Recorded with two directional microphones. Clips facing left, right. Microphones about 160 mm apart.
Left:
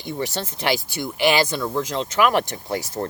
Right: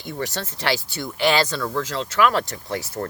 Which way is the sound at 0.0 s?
20° left (ahead or behind).